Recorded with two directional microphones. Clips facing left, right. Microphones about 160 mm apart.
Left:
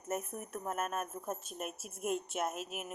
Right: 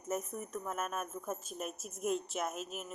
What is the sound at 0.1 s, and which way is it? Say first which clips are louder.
Speech: right 1 dB; 5° left (ahead or behind).